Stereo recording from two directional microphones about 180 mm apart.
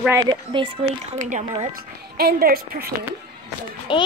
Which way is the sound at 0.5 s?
25° right (ahead or behind).